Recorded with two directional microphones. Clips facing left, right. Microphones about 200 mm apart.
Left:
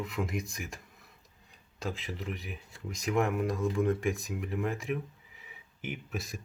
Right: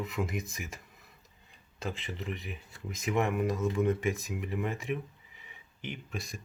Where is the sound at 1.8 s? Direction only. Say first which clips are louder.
Left 1 dB; centre (ahead or behind).